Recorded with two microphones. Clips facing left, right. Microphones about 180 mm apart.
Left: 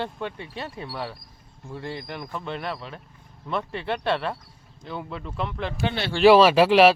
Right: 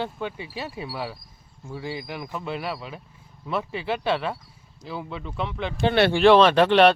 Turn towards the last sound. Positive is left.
turn(degrees=5)  # may be behind; listen again after turning